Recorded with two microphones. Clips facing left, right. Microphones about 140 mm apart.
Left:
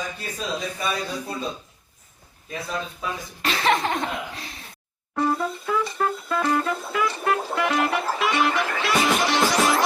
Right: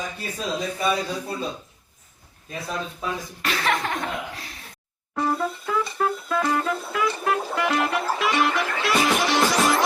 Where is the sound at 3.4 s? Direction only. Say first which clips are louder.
Left 3 dB; 25° left (ahead or behind).